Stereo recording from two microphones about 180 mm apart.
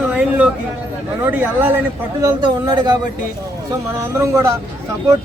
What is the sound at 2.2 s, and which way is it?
Speech, 25° right (ahead or behind).